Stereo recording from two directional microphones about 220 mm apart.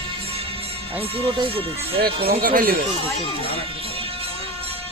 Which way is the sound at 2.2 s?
40° right (ahead or behind).